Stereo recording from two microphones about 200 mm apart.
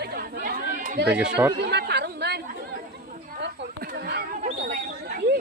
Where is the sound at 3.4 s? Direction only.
55° right (ahead or behind).